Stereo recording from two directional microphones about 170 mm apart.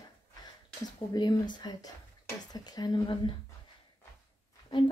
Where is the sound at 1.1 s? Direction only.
25° left (ahead or behind).